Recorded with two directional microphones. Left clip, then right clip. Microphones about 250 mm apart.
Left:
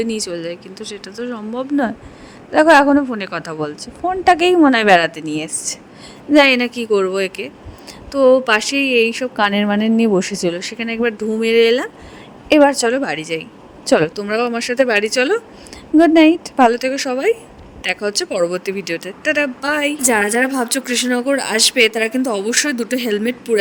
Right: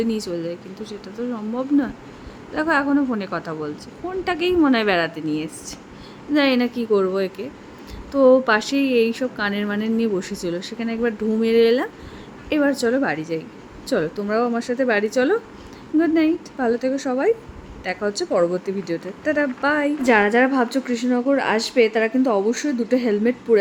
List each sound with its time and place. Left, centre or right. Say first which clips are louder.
0.0 s a woman's voice: left 3 dB; left
20.1 s a woman's voice: right 1 dB; centre
20.7 s a woman's voice: left 4 dB; left